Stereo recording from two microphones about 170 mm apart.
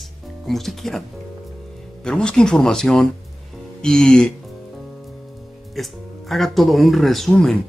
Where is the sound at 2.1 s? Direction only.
5° left (ahead or behind).